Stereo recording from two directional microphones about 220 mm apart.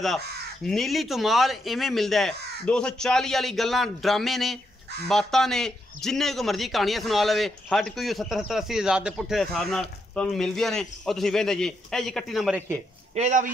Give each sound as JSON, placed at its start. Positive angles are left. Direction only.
{"t": 0.7, "sound": "a man's voice", "side_deg": 0}
{"t": 13.1, "sound": "speech", "side_deg": -30}